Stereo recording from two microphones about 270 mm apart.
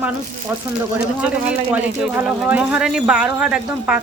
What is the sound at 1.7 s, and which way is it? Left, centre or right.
Speech, centre.